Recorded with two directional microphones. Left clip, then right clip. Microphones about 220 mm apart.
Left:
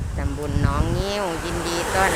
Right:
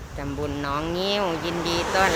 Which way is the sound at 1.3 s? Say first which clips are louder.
Even; 50° left (ahead or behind).